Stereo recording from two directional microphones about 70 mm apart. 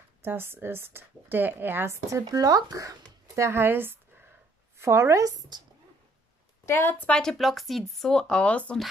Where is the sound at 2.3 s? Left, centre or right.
Right.